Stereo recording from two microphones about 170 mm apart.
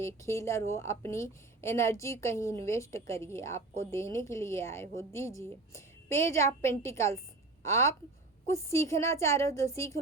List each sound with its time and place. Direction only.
0.0 s a woman's voice: 15° left (ahead or behind)